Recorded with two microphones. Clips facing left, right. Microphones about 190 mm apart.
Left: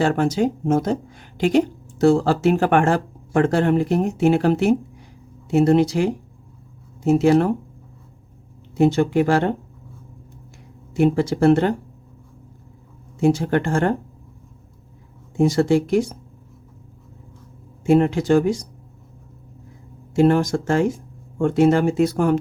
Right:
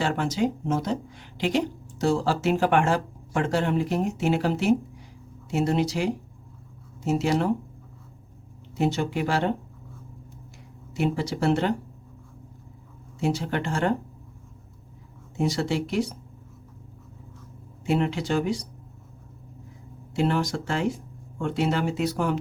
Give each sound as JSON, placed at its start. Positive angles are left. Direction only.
{"t": 0.0, "sound": "speech", "side_deg": 50}
{"t": 8.7, "sound": "speech", "side_deg": 55}
{"t": 10.9, "sound": "speech", "side_deg": 50}
{"t": 13.1, "sound": "speech", "side_deg": 50}
{"t": 15.4, "sound": "speech", "side_deg": 50}
{"t": 17.8, "sound": "speech", "side_deg": 50}
{"t": 20.1, "sound": "speech", "side_deg": 50}